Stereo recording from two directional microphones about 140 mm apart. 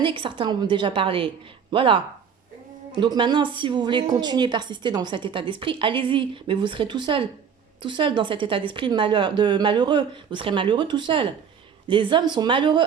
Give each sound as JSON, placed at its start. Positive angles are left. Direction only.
{"t": 0.0, "sound": "a woman's voice", "side_deg": -35}
{"t": 3.0, "sound": "a woman's voice", "side_deg": -35}